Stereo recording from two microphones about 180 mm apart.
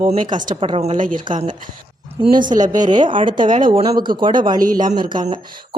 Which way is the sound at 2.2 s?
25° right (ahead or behind).